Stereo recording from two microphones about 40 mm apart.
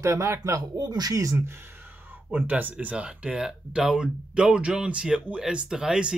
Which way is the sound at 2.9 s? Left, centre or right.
Right.